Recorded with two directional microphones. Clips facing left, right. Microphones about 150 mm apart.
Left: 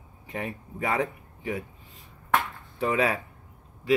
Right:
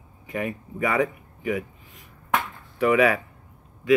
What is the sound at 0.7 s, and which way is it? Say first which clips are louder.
Speech: right 4 dB; 75° right (ahead or behind).